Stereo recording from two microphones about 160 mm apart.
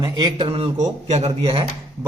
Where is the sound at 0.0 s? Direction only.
25° right (ahead or behind).